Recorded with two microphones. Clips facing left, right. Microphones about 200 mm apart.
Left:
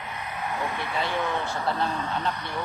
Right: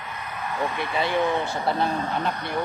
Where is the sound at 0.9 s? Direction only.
15° right (ahead or behind).